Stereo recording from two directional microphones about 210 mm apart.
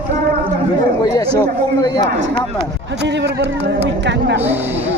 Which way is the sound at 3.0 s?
55° right (ahead or behind).